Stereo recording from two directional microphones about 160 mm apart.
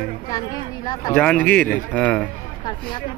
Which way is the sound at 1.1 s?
10° left (ahead or behind).